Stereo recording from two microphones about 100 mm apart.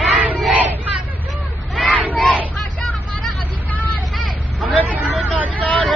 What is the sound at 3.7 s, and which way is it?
Vehicle, 15° left (ahead or behind).